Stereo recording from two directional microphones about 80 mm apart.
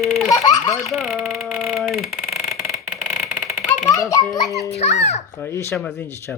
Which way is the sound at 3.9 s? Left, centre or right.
Left.